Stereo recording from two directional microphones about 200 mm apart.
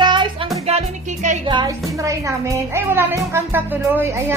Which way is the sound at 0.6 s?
35° right (ahead or behind).